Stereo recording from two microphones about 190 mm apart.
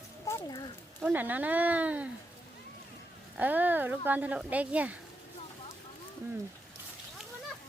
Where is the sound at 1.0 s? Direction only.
10° right (ahead or behind).